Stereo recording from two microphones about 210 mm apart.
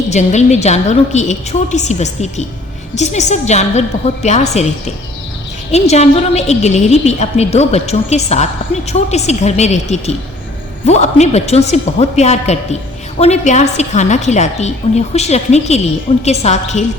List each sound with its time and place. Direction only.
0.1 s a woman's voice: 35° left (ahead or behind)
5.7 s a woman's voice: 30° left (ahead or behind)